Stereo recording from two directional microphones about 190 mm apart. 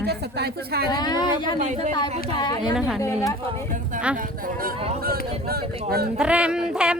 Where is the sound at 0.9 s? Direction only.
20° left (ahead or behind).